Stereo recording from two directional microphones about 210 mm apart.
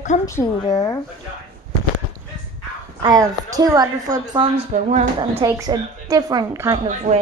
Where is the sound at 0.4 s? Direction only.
20° left (ahead or behind).